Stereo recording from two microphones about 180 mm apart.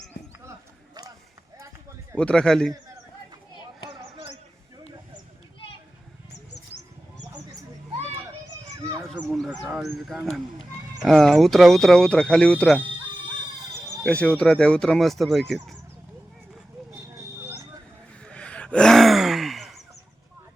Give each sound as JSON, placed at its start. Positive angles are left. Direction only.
{"t": 2.1, "sound": "speech", "side_deg": 5}
{"t": 9.1, "sound": "goose", "side_deg": 0}
{"t": 9.5, "sound": "speech", "side_deg": -5}
{"t": 14.0, "sound": "speech", "side_deg": 5}
{"t": 18.3, "sound": "gasp", "side_deg": 5}